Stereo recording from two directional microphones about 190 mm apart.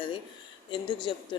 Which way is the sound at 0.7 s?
25° left (ahead or behind).